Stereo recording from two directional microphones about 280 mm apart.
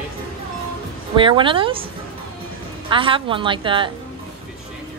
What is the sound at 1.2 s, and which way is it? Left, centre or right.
Speech, centre.